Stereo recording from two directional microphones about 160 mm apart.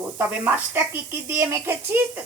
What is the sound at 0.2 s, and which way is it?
A woman's voice, 10° right (ahead or behind).